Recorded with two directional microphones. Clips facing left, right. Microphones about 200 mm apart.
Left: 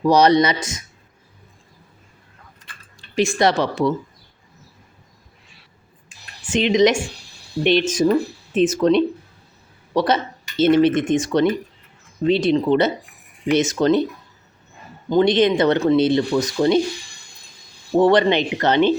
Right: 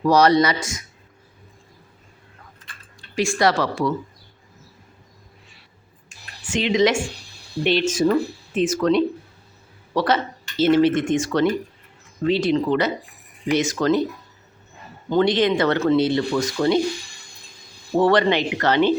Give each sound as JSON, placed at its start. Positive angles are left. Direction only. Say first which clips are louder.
{"t": 0.0, "sound": "speech", "louder": "left 1 dB", "side_deg": 20}
{"t": 3.2, "sound": "speech", "louder": "left 2 dB", "side_deg": 20}
{"t": 6.5, "sound": "speech", "louder": "left 3 dB", "side_deg": 20}
{"t": 15.1, "sound": "speech", "louder": "left 3 dB", "side_deg": 20}
{"t": 17.9, "sound": "speech", "louder": "left 2 dB", "side_deg": 20}